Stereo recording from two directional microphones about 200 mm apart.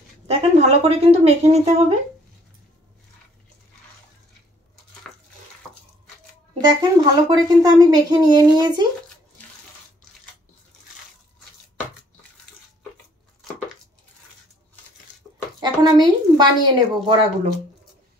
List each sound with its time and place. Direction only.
0.3 s speech: 30° right (ahead or behind)
6.6 s speech: 20° right (ahead or behind)
15.6 s a sound: 20° right (ahead or behind)